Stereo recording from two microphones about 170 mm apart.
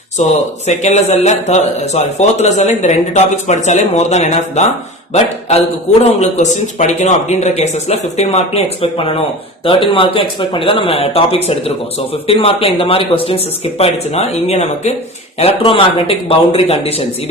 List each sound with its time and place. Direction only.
0.2 s speech: 40° left (ahead or behind)